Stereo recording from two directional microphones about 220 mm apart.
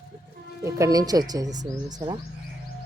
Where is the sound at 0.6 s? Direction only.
15° right (ahead or behind).